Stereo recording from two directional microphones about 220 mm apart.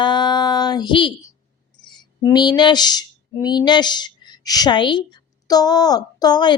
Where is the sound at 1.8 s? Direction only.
20° left (ahead or behind).